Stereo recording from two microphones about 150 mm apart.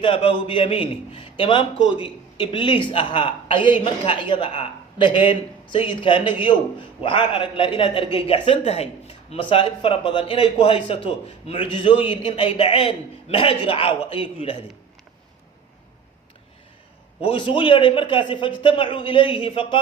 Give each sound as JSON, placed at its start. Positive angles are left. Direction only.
{"t": 0.0, "sound": "a man's voice", "side_deg": 35}
{"t": 17.2, "sound": "a man's voice", "side_deg": 35}